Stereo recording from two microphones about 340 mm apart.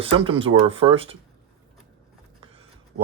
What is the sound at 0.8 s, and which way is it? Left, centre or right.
Speech, centre.